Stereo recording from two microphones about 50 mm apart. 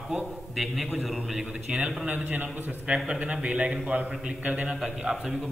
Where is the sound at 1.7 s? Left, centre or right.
Right.